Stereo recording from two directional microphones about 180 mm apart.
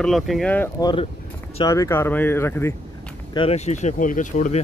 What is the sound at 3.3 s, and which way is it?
Speech, 30° left (ahead or behind).